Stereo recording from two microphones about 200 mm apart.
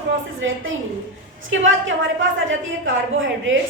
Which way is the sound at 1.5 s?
70° right (ahead or behind).